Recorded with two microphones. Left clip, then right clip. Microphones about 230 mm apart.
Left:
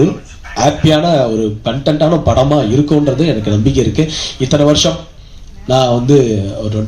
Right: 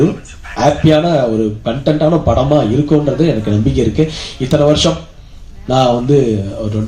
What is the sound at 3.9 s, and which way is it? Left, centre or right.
Speech, left.